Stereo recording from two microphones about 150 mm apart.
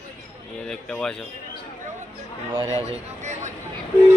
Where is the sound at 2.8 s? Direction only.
50° right (ahead or behind).